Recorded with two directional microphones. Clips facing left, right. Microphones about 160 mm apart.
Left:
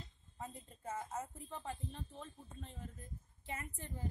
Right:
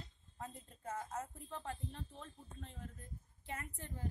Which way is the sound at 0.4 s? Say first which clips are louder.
Left 1 dB; 5° left (ahead or behind).